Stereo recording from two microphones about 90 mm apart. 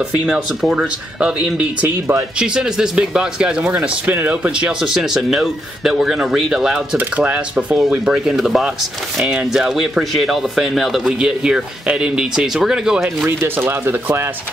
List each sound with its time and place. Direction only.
0.6 s speech: 10° right (ahead or behind)
13.4 s speech: 25° right (ahead or behind)